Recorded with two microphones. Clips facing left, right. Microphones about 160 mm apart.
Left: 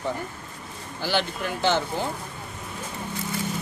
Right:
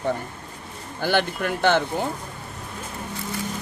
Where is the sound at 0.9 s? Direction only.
55° right (ahead or behind).